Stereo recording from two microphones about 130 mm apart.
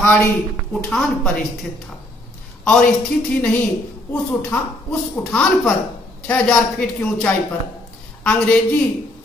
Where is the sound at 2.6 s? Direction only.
5° left (ahead or behind).